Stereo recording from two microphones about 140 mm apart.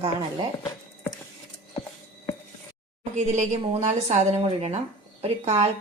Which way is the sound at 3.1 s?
60° right (ahead or behind).